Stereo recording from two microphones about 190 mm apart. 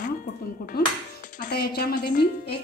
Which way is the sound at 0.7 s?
55° left (ahead or behind).